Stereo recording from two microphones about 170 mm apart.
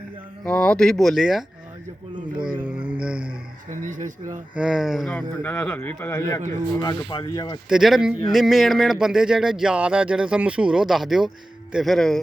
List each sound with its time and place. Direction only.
0.4 s speech: 5° left (ahead or behind)
2.6 s a sound: 10° right (ahead or behind)
3.7 s speech: 50° right (ahead or behind)
4.5 s speech: 5° right (ahead or behind)
5.1 s a man's voice: 10° left (ahead or behind); by 7.6 s 25° left (ahead or behind)
7.7 s speech: centre (ahead or behind)